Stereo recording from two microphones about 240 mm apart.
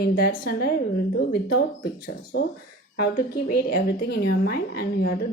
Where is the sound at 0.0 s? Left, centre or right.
Left.